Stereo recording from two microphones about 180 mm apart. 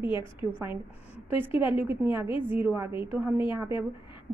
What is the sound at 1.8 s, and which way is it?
A woman's voice, 10° right (ahead or behind).